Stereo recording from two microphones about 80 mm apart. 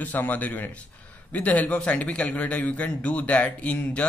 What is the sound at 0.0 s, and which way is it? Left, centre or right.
A man's voice, left.